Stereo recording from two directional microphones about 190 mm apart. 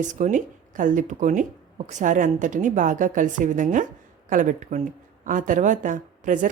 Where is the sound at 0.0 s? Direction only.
40° right (ahead or behind).